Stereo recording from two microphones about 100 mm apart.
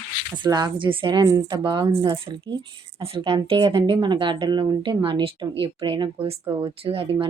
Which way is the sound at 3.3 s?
50° right (ahead or behind).